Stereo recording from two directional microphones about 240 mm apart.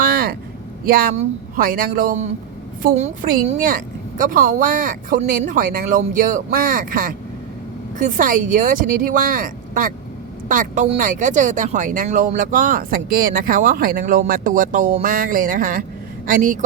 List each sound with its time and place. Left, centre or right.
0.0 s vehicle: right
0.9 s speech: right